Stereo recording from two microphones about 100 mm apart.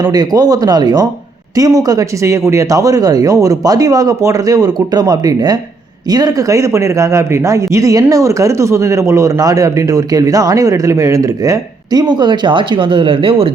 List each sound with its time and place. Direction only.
0.0 s speech: 40° right (ahead or behind); by 13.5 s 60° right (ahead or behind)